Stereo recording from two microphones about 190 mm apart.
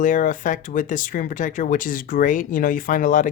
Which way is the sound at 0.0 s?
45° left (ahead or behind).